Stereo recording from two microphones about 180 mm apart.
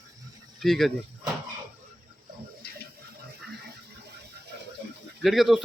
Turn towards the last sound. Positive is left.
turn(degrees=0)  # may be behind; listen again after turning